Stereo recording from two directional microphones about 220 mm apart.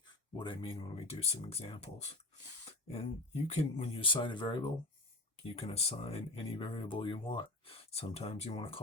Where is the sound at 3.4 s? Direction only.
30° left (ahead or behind).